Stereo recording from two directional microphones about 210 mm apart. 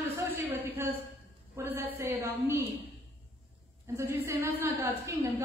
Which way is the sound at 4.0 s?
10° right (ahead or behind).